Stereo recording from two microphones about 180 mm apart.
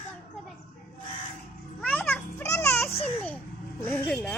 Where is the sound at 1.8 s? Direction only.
10° left (ahead or behind).